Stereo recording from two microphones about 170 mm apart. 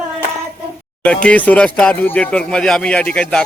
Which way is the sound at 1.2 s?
10° left (ahead or behind).